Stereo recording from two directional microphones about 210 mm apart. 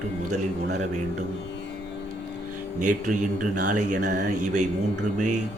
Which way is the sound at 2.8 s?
35° right (ahead or behind).